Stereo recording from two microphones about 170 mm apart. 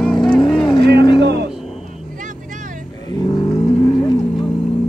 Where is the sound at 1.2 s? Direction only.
80° right.